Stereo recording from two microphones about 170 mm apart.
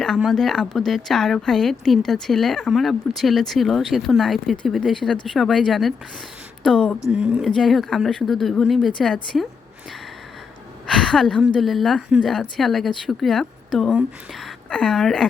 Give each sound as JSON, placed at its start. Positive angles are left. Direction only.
{"t": 0.0, "sound": "a woman's voice", "side_deg": 0}
{"t": 10.8, "sound": "a woman's voice", "side_deg": 5}